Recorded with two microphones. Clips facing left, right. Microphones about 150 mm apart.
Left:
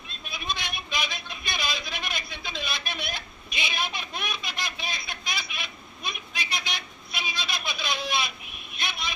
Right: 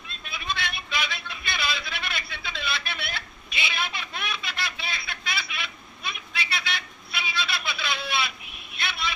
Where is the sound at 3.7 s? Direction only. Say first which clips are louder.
Left 1 dB; 15° left (ahead or behind).